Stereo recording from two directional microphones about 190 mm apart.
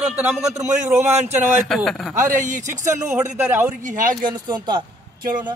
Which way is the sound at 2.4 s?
40° right (ahead or behind).